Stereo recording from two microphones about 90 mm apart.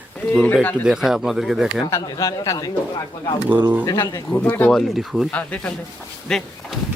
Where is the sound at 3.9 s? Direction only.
30° left (ahead or behind).